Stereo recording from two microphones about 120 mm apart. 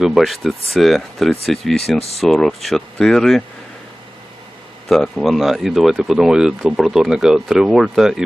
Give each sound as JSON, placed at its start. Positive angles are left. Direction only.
{"t": 0.0, "sound": "speech", "side_deg": -5}
{"t": 2.0, "sound": "speech", "side_deg": 60}
{"t": 2.2, "sound": "speech", "side_deg": 0}
{"t": 4.9, "sound": "speech", "side_deg": 0}